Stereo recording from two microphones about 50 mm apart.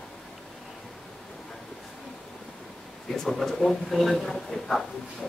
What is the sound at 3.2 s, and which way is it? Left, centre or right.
Speech, centre.